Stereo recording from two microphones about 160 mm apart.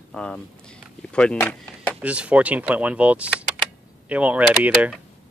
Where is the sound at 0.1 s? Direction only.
5° left (ahead or behind).